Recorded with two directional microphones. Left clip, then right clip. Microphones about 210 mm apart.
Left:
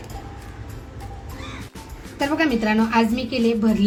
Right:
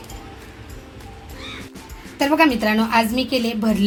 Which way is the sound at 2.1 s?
40° right (ahead or behind).